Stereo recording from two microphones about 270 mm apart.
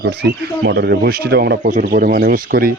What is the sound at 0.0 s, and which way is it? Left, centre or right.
A man's voice, right.